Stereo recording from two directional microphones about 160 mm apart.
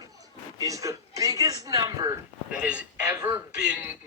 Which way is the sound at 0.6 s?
20° right (ahead or behind).